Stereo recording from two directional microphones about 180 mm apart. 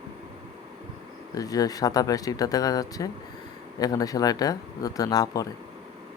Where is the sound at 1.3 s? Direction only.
20° left (ahead or behind).